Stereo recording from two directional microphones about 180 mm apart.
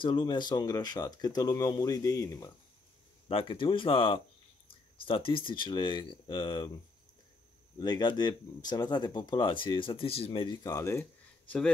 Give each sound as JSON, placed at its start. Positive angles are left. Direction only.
{"t": 0.0, "sound": "speech", "side_deg": 25}
{"t": 3.3, "sound": "speech", "side_deg": 30}
{"t": 7.8, "sound": "speech", "side_deg": 25}